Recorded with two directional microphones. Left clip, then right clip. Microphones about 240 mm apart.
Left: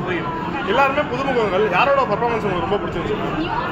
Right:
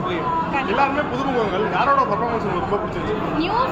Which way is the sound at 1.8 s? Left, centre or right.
Centre.